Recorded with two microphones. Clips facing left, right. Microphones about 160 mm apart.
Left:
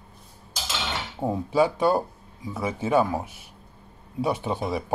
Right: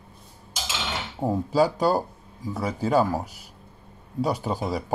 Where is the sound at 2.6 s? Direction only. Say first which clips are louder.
Even; 20° left (ahead or behind).